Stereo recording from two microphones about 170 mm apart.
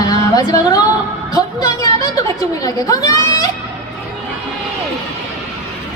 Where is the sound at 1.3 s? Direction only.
20° left (ahead or behind).